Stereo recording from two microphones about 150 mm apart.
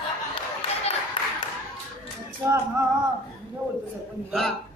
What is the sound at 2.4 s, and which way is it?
Speech, 20° right (ahead or behind).